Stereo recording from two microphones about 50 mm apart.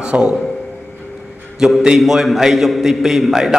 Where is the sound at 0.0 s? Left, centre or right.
Right.